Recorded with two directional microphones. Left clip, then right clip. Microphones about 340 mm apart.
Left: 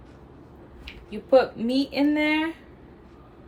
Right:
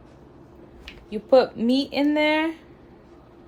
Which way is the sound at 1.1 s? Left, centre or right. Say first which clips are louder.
Right 2 dB; right.